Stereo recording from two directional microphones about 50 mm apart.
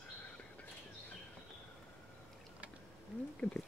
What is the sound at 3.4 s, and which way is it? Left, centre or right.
Speech, centre.